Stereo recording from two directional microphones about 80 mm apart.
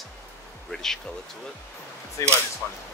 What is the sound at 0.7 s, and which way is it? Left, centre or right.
Speech, centre.